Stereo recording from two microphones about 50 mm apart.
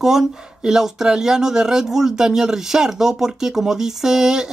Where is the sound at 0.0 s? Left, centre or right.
Centre.